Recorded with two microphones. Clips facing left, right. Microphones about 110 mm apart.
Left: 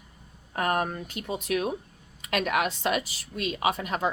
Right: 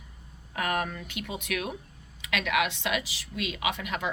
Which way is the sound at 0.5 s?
40° left (ahead or behind).